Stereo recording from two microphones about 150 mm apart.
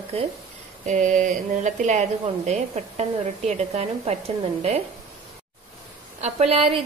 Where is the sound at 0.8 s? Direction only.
55° right (ahead or behind).